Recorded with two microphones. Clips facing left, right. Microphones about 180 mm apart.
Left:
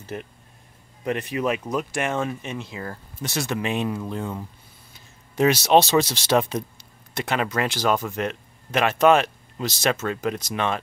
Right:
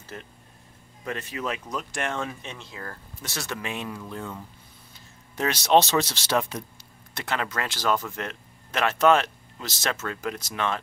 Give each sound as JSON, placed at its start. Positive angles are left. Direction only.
{"t": 0.0, "sound": "speech", "side_deg": 20}
{"t": 5.4, "sound": "speech", "side_deg": 10}